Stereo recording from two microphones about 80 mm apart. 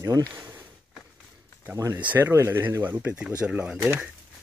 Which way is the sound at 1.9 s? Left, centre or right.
Right.